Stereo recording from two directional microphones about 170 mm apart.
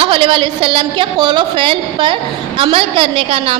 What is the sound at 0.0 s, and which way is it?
A woman's voice, 30° right (ahead or behind).